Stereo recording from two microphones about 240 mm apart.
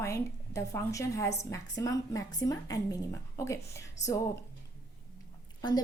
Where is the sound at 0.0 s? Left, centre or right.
Centre.